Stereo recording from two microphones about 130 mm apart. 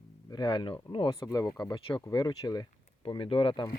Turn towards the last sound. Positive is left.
turn(degrees=40)  # may be behind; listen again after turning